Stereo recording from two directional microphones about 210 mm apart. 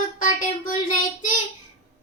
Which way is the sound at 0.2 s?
40° left (ahead or behind).